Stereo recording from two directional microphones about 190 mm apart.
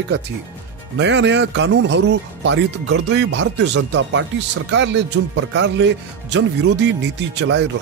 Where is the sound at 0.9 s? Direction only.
70° right (ahead or behind).